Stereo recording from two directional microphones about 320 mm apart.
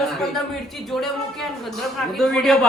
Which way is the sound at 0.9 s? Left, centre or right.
Centre.